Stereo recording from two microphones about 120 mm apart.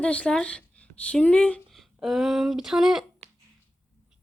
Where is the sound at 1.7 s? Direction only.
5° right (ahead or behind).